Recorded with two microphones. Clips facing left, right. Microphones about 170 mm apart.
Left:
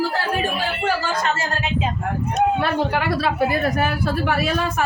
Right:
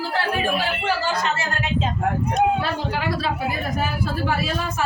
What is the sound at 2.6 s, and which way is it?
Speech, 60° left (ahead or behind).